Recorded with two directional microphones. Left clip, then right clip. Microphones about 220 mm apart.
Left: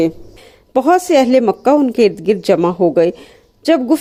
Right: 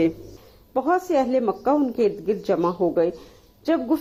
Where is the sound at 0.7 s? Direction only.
50° left (ahead or behind).